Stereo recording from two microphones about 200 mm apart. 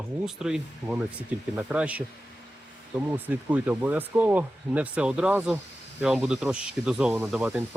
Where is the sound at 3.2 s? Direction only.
10° right (ahead or behind).